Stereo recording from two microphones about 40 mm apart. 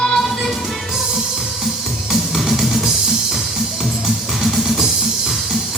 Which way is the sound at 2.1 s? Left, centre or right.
Centre.